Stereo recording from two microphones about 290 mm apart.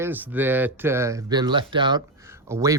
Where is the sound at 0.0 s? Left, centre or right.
Centre.